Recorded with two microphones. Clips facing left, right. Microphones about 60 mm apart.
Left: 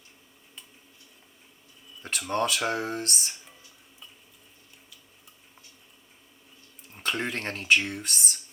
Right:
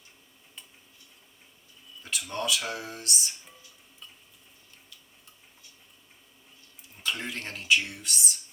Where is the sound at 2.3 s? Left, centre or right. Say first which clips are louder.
Left 5 dB; left.